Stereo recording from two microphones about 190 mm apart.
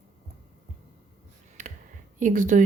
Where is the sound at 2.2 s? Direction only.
40° right (ahead or behind).